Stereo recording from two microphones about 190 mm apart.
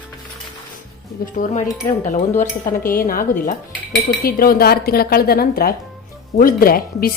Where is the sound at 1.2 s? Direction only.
45° left (ahead or behind).